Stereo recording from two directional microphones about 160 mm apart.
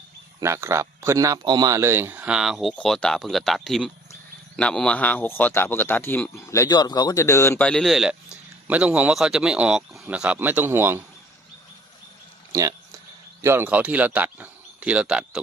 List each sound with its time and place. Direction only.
0.3 s speech: 15° right (ahead or behind); by 7.7 s 15° left (ahead or behind)
7.7 s speech: centre (ahead or behind)
12.5 s speech: 20° right (ahead or behind); by 15.4 s 5° right (ahead or behind)